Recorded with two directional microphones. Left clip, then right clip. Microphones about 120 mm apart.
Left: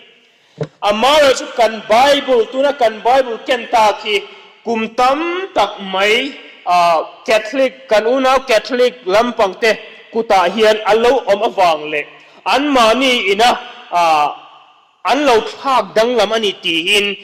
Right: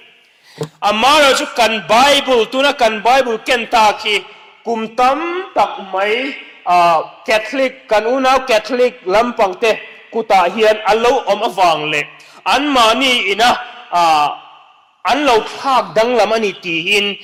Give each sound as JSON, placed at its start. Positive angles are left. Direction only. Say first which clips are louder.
{"t": 0.6, "sound": "a man's voice", "louder": "even", "side_deg": -45}
{"t": 4.9, "sound": "a man's voice", "louder": "even", "side_deg": -25}
{"t": 10.3, "sound": "a man's voice", "louder": "even", "side_deg": -25}
{"t": 16.0, "sound": "a man's voice", "louder": "right 1 dB", "side_deg": -40}
{"t": 16.4, "sound": "a man's voice", "louder": "left 2 dB", "side_deg": -15}